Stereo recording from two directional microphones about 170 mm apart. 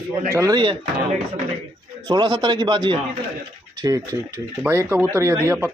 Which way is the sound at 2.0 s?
25° right (ahead or behind).